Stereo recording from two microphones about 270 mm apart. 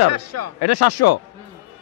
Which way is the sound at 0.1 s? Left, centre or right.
Right.